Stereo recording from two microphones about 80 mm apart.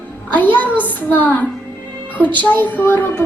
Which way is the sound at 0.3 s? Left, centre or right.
Left.